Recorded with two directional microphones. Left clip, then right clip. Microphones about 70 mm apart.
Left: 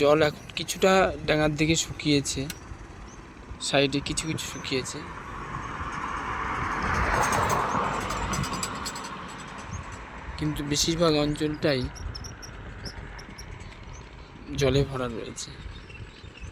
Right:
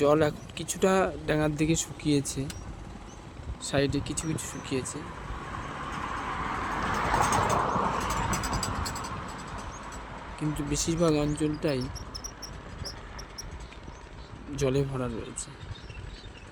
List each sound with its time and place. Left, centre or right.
0.0 s speech: centre
3.6 s speech: centre
5.0 s vehicle: centre; by 6.8 s left
6.8 s vehicle: left
7.9 s vehicle: centre; by 10.2 s right
10.3 s speech: centre
12.1 s a sound: centre
14.5 s speech: centre